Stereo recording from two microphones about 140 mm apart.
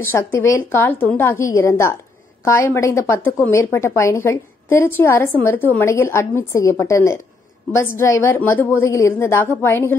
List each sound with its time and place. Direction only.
0.0 s a woman's voice: 15° left (ahead or behind)